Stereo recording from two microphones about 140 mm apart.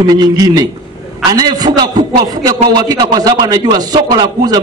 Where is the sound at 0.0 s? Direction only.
30° right (ahead or behind).